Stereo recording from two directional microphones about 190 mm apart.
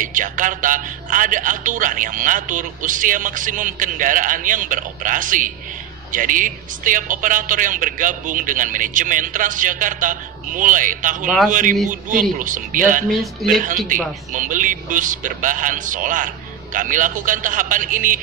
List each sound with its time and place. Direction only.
0.0 s a man's voice: 45° right (ahead or behind)
13.1 s speech: centre (ahead or behind)
13.8 s a man's voice: 45° right (ahead or behind)